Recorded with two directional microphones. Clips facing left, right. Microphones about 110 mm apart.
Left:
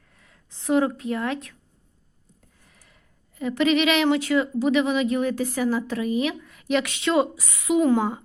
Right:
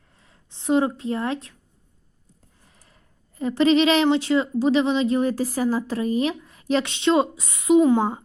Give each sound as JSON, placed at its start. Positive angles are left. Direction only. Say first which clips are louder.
{"t": 0.2, "sound": "speech", "louder": "even", "side_deg": -25}
{"t": 2.6, "sound": "a sound", "louder": "right 2 dB", "side_deg": -35}
{"t": 4.0, "sound": "speech", "louder": "right 1 dB", "side_deg": -25}